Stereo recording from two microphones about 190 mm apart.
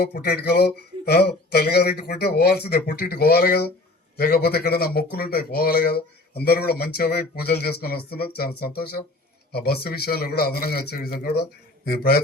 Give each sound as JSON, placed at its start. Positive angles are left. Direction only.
{"t": 0.0, "sound": "a man's voice", "side_deg": 55}